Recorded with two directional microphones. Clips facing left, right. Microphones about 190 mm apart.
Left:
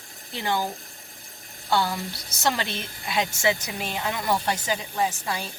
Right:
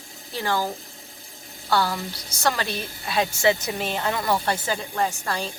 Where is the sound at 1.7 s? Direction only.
20° left (ahead or behind).